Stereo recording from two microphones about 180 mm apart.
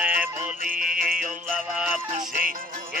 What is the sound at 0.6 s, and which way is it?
Music, 50° right (ahead or behind).